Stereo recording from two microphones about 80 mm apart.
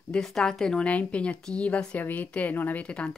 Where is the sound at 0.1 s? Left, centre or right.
Centre.